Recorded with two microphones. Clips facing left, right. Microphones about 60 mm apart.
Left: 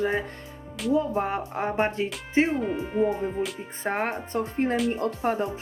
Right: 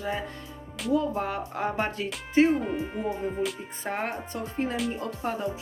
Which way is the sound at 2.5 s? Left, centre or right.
Centre.